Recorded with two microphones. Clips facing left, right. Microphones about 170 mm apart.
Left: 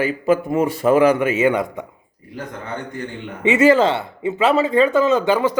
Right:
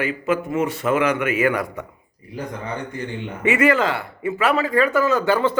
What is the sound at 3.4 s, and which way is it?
Speech, 25° left (ahead or behind).